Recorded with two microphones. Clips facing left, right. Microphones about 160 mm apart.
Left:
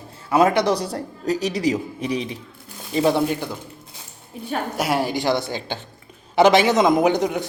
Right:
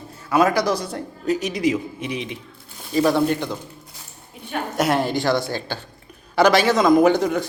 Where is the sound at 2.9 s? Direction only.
20° left (ahead or behind).